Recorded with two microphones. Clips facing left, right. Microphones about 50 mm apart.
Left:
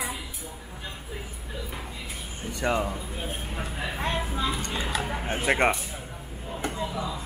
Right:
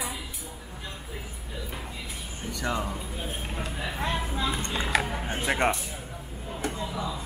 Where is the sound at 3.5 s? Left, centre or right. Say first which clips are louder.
Left 1 dB; centre.